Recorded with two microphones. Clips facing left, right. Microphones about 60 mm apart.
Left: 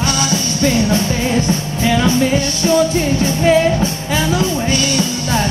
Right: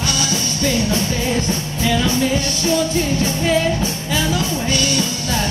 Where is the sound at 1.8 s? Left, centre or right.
Left.